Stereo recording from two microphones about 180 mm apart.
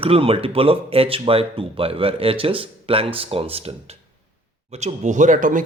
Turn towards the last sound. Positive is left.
turn(degrees=-50)  # may be behind; listen again after turning